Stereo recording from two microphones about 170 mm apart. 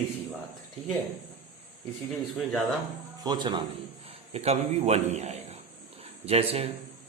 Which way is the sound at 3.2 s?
25° right (ahead or behind).